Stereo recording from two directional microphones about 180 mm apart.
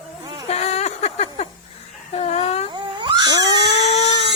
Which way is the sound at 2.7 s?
25° right (ahead or behind).